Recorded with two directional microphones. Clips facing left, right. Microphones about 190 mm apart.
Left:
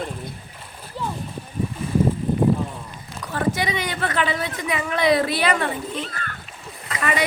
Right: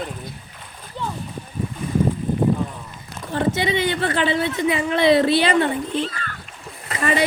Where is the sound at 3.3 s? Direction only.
25° right (ahead or behind).